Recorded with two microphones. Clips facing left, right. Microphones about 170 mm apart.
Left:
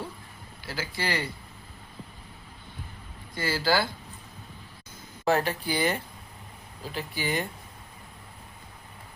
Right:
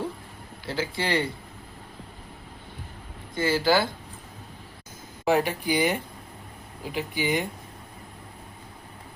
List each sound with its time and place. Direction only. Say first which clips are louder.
0.7 s speech: right 5 dB; 25° right (ahead or behind)
3.3 s speech: right 4 dB; 20° right (ahead or behind)
5.2 s speech: right 2 dB; 15° right (ahead or behind)